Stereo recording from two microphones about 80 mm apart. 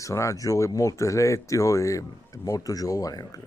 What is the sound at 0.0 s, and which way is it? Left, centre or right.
Speech, left.